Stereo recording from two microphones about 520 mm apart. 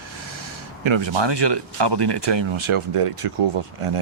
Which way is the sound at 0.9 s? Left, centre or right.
Right.